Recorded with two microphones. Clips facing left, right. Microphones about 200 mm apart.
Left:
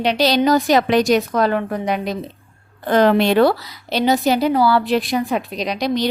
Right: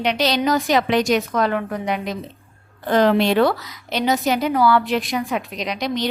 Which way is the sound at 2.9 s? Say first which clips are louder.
Left 2 dB; 55° left (ahead or behind).